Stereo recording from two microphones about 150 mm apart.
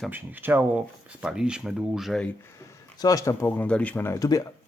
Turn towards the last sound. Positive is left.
turn(degrees=25)  # may be behind; listen again after turning